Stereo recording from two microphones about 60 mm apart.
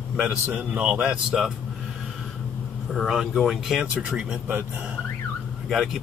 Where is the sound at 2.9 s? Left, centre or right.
Centre.